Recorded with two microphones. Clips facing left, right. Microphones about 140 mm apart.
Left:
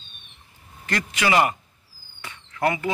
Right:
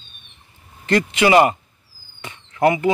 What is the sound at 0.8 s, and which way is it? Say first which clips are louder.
Speech: right 8 dB; 25° right (ahead or behind).